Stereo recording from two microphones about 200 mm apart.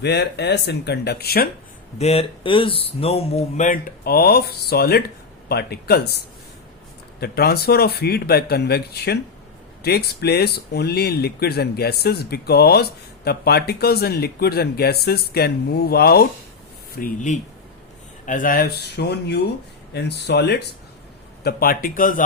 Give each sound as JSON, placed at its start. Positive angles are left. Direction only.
{"t": 0.0, "sound": "speech", "side_deg": 55}
{"t": 2.0, "sound": "speech", "side_deg": 30}
{"t": 7.2, "sound": "speech", "side_deg": 50}
{"t": 16.9, "sound": "speech", "side_deg": 40}